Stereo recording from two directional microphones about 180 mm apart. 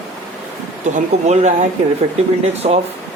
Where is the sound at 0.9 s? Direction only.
40° right (ahead or behind).